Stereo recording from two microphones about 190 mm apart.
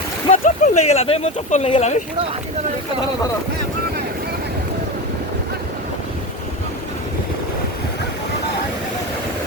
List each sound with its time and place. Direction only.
0.3 s speech: 40° left (ahead or behind)